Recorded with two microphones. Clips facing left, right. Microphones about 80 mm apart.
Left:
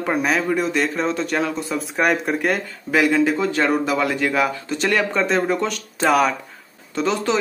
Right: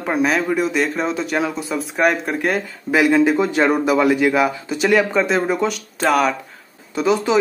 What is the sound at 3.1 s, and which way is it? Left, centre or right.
Speech, centre.